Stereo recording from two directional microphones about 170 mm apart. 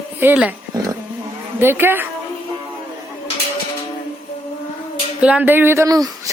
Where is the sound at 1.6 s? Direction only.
15° right (ahead or behind).